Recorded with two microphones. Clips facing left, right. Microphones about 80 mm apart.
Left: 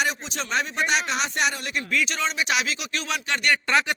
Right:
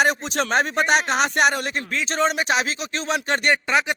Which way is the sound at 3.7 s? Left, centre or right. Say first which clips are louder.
Right 1 dB; centre.